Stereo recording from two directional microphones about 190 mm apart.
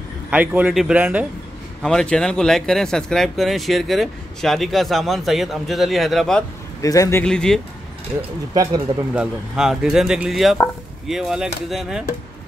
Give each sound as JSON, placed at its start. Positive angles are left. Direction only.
{"t": 0.3, "sound": "speech", "side_deg": -10}
{"t": 1.8, "sound": "speech", "side_deg": 5}
{"t": 6.8, "sound": "a man's voice", "side_deg": 20}
{"t": 7.2, "sound": "speech", "side_deg": 5}
{"t": 9.1, "sound": "speech", "side_deg": -5}